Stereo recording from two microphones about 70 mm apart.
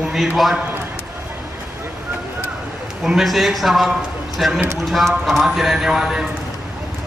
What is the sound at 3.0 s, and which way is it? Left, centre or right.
A man's voice, centre.